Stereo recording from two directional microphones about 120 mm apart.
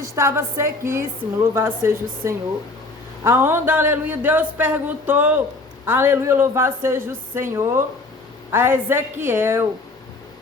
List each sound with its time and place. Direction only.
0.0 s a man's voice: 25° right (ahead or behind)